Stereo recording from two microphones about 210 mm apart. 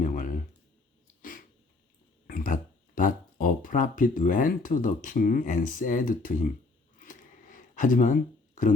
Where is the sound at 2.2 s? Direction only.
40° left (ahead or behind).